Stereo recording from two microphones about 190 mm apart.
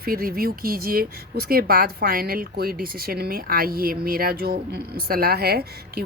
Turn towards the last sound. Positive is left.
turn(degrees=-55)  # may be behind; listen again after turning